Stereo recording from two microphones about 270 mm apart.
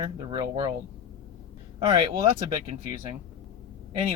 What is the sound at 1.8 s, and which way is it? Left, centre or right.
Speech, centre.